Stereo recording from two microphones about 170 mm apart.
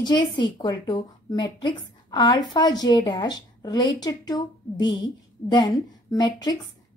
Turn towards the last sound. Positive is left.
turn(degrees=25)  # may be behind; listen again after turning